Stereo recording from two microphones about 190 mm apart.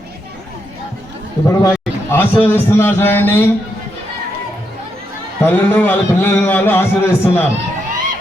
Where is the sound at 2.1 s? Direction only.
10° left (ahead or behind).